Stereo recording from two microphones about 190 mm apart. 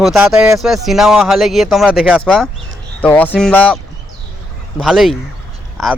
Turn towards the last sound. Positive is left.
turn(degrees=0)  # may be behind; listen again after turning